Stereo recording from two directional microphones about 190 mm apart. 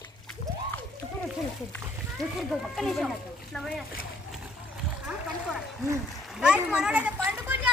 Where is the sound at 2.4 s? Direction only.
Centre (ahead or behind).